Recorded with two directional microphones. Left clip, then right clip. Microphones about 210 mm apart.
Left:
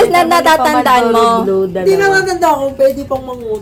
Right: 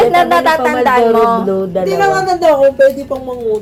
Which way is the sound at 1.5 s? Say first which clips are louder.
Left 2 dB; 15° left (ahead or behind).